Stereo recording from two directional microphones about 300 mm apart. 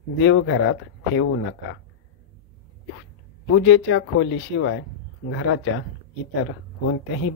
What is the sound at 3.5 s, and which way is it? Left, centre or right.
Speech, left.